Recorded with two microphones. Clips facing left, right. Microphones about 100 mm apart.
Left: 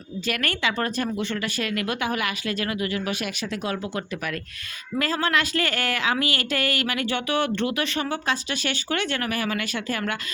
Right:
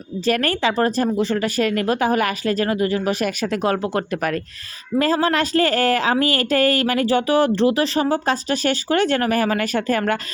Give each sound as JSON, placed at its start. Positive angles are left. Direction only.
{"t": 0.3, "sound": "a woman's voice", "side_deg": -35}